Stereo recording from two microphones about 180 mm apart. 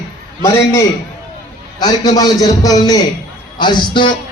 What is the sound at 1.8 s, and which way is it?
A man's voice, 20° left (ahead or behind).